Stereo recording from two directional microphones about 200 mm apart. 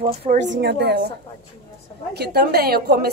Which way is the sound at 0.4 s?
60° right (ahead or behind).